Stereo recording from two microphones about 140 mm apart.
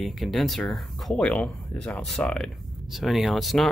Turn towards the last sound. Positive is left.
turn(degrees=0)  # may be behind; listen again after turning